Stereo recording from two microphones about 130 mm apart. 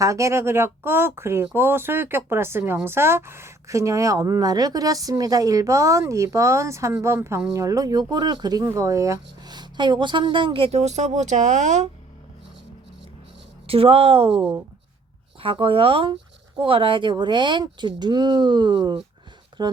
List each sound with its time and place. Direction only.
0.0 s speech: 25° right (ahead or behind); by 11.9 s 65° right (ahead or behind)
13.7 s a woman's voice: 45° right (ahead or behind)